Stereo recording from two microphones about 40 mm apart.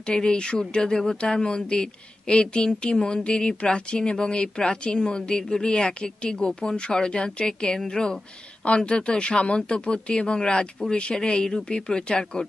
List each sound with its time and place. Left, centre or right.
0.0 s speech: left